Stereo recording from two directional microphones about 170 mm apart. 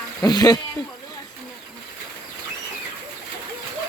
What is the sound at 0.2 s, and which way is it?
Speech, 25° left (ahead or behind).